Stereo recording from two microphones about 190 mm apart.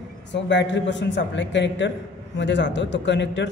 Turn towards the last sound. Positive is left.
turn(degrees=70)  # may be behind; listen again after turning